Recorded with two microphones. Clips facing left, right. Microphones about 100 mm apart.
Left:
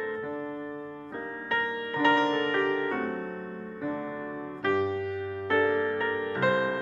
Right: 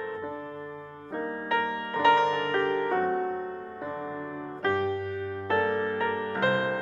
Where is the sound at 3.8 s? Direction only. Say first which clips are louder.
Left 3 dB; 25° right (ahead or behind).